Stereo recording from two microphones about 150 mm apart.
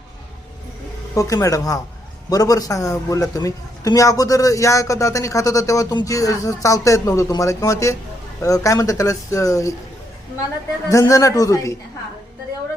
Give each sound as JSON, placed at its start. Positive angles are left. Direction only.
{"t": 1.1, "sound": "a man's voice", "side_deg": 20}
{"t": 10.8, "sound": "a man's voice", "side_deg": 20}